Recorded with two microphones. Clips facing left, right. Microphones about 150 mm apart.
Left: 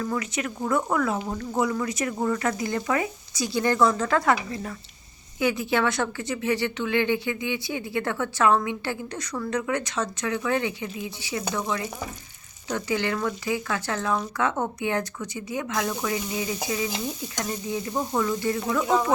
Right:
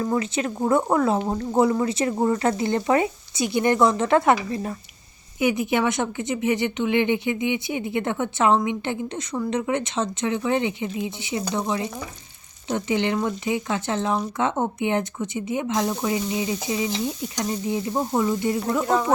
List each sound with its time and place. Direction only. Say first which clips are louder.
0.0 s speech: right 4 dB; 30° right (ahead or behind)